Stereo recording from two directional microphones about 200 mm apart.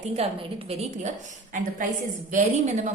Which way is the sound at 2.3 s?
35° right (ahead or behind).